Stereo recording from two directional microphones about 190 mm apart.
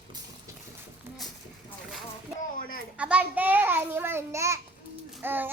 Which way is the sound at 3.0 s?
5° right (ahead or behind).